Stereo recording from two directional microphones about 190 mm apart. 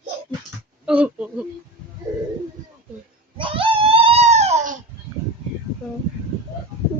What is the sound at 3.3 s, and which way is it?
Baby cry, 25° right (ahead or behind).